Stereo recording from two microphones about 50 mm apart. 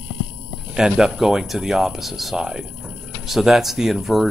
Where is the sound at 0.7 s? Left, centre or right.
Centre.